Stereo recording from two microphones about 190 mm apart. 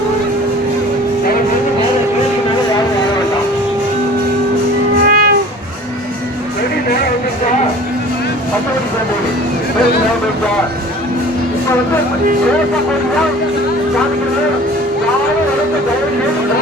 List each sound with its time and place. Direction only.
5.0 s music: 50° right (ahead or behind)